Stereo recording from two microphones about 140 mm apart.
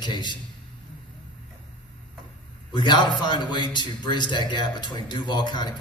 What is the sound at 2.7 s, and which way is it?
A man's voice, 35° left (ahead or behind).